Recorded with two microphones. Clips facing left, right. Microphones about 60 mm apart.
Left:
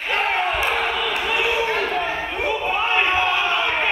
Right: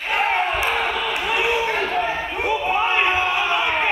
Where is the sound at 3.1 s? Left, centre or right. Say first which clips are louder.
Even; centre.